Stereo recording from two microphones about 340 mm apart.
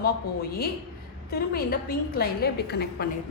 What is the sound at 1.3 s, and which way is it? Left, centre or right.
A woman's voice, left.